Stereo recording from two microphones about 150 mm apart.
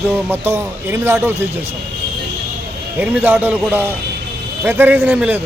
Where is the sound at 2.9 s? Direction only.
10° right (ahead or behind).